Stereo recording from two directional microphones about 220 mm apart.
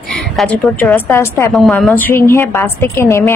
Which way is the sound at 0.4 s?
5° left (ahead or behind).